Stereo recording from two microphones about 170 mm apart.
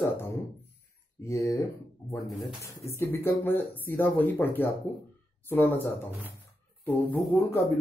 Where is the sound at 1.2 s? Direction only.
15° left (ahead or behind).